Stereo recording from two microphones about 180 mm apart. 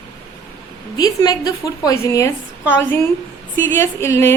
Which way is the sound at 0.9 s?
20° left (ahead or behind).